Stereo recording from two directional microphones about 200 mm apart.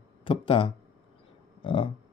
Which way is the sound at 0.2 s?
25° left (ahead or behind).